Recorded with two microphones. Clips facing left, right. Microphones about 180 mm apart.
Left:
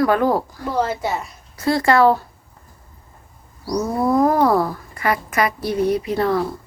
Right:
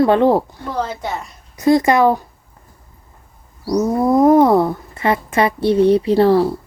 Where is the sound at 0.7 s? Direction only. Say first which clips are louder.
Left 2 dB; 5° left (ahead or behind).